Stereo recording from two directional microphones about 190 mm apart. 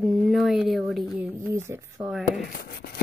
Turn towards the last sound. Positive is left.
turn(degrees=50)  # may be behind; listen again after turning